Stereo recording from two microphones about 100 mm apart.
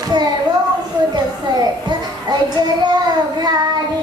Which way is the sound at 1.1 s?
45° right (ahead or behind).